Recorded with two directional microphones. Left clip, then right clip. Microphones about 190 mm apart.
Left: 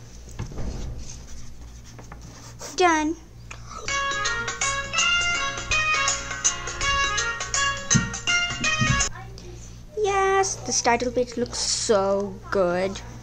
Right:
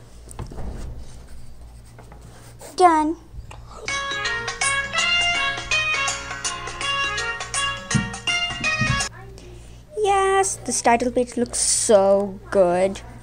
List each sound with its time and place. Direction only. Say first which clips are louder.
2.7 s a child's voice: right 5 dB; 10° right (ahead or behind)
3.8 s music: even; 30° right (ahead or behind)
10.0 s speech: right 3 dB; 20° right (ahead or behind)